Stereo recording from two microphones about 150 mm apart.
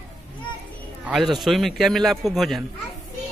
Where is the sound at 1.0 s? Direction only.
5° right (ahead or behind).